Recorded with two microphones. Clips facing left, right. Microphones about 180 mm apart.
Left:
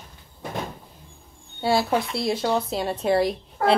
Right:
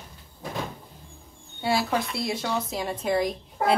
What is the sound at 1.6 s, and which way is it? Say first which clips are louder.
Speech: left 3 dB; 25° left (ahead or behind).